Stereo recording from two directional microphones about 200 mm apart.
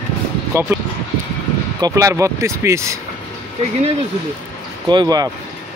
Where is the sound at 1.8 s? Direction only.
15° right (ahead or behind).